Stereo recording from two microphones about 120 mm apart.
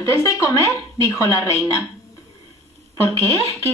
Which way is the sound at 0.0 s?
25° left (ahead or behind).